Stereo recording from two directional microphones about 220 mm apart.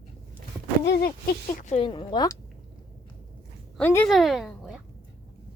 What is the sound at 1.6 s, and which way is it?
Speech, 30° left (ahead or behind).